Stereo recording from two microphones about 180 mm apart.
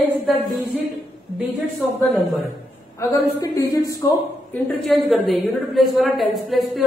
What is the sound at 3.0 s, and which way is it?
Speech, 20° left (ahead or behind).